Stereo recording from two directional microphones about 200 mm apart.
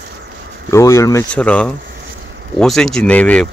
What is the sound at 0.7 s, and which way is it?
Speech, 15° left (ahead or behind).